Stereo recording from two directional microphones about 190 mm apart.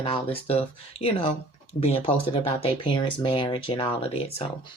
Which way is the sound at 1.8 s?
30° left (ahead or behind).